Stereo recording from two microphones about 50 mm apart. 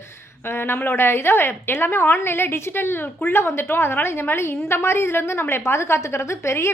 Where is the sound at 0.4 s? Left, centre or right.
Left.